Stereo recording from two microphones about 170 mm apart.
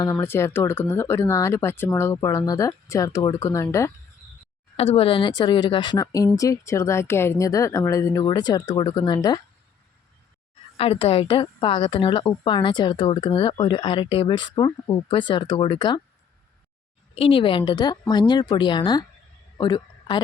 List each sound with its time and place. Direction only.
0.0 s speech: 15° left (ahead or behind)
4.8 s a woman's voice: 35° left (ahead or behind)
10.8 s a woman's voice: 35° left (ahead or behind)
17.2 s a woman's voice: 30° left (ahead or behind)